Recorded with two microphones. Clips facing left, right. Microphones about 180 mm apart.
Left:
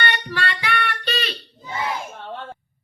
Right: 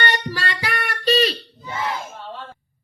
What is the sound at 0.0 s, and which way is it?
Child singing, 40° right (ahead or behind).